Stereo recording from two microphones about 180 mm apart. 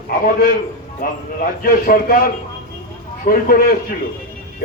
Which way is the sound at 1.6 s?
55° left (ahead or behind).